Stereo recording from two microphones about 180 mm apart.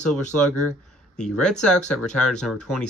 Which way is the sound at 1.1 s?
5° left (ahead or behind).